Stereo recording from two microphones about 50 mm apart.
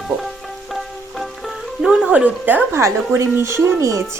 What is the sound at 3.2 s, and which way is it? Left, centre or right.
Speech, right.